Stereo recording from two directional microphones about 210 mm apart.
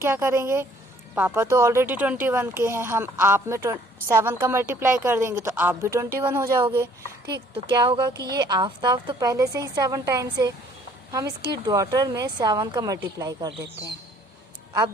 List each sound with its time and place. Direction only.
0.0 s speech: 10° right (ahead or behind)